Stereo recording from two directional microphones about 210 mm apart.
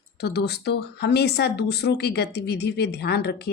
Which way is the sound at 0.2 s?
50° left (ahead or behind).